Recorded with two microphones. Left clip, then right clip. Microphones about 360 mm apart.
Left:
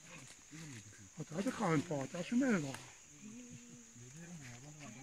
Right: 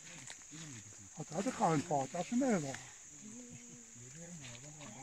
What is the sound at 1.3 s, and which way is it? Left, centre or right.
Speech, centre.